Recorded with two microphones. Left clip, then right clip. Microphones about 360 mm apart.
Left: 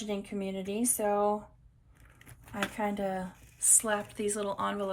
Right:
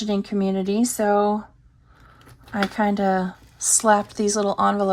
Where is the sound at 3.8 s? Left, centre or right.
Centre.